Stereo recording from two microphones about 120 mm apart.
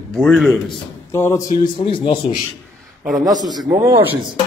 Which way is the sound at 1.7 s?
45° left (ahead or behind).